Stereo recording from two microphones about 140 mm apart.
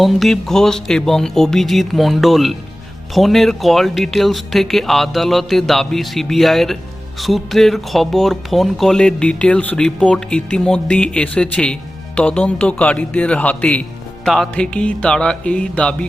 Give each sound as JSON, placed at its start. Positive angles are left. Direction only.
{"t": 0.0, "sound": "speech", "side_deg": 0}